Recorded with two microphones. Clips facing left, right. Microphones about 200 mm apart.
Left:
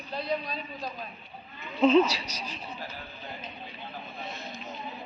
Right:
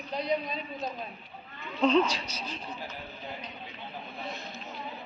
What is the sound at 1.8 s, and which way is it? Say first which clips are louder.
Speech: left 3 dB; 5° left (ahead or behind).